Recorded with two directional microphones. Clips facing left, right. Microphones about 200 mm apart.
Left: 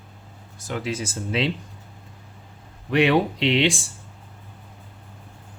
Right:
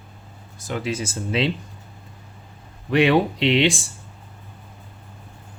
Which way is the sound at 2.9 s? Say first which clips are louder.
Right 2 dB; 30° right (ahead or behind).